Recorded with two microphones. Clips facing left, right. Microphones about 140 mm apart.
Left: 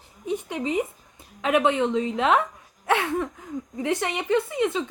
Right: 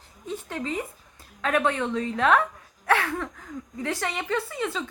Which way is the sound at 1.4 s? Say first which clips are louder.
Left 3 dB; 20° left (ahead or behind).